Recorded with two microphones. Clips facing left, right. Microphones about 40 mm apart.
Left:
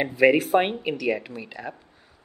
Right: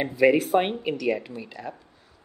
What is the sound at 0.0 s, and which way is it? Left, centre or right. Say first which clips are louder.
Speech: left 1 dB; centre.